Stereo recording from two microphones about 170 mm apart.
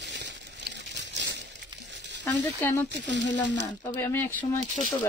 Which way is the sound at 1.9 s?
90° right.